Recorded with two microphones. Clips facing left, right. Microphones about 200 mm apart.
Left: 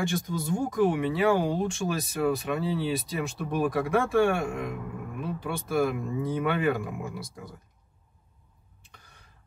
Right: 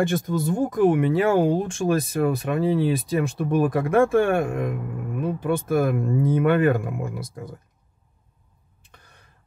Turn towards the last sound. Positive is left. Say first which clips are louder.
# right 5 dB
turn(degrees=-55)  # may be behind; listen again after turning